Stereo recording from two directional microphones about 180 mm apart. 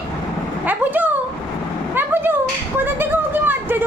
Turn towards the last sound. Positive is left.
turn(degrees=-10)  # may be behind; listen again after turning